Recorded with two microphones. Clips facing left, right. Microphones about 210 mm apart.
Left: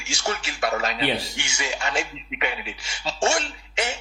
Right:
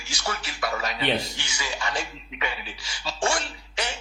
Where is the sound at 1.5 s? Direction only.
25° left (ahead or behind).